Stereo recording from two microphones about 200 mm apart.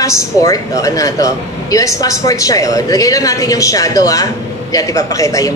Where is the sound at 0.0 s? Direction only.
15° left (ahead or behind).